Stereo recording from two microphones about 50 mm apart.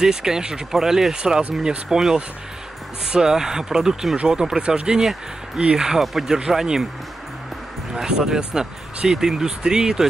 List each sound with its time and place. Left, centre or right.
0.0 s speech: centre
5.9 s speech: centre
7.9 s speech: centre